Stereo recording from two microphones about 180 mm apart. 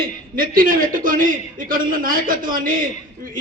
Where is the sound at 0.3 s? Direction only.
50° right (ahead or behind).